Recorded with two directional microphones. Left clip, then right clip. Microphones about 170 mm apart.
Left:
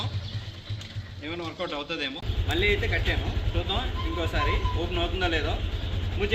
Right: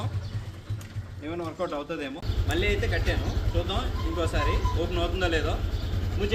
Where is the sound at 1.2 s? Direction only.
10° right (ahead or behind).